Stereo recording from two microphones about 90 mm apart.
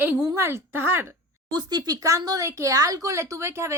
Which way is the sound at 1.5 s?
50° right (ahead or behind).